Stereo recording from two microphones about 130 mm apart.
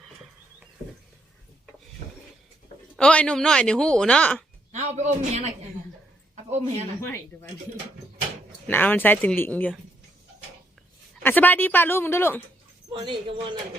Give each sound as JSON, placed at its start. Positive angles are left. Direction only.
{"t": 3.0, "sound": "a woman's voice", "side_deg": 5}
{"t": 4.7, "sound": "speech", "side_deg": -60}
{"t": 6.3, "sound": "a sound", "side_deg": -55}
{"t": 8.6, "sound": "a woman's voice", "side_deg": 15}
{"t": 11.2, "sound": "a woman's voice", "side_deg": 15}
{"t": 12.9, "sound": "speech", "side_deg": -40}